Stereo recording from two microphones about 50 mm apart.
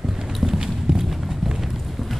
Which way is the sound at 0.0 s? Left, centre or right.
Centre.